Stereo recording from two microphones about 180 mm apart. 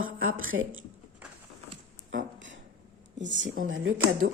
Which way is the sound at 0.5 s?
90° right.